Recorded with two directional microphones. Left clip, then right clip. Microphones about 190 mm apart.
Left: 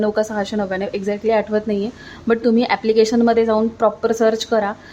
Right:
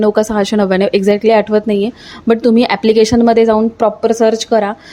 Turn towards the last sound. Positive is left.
turn(degrees=-25)  # may be behind; listen again after turning